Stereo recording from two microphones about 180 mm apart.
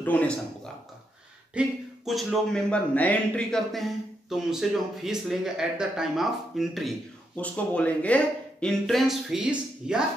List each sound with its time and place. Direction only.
0.0 s speech: 10° left (ahead or behind)
1.5 s speech: 5° right (ahead or behind)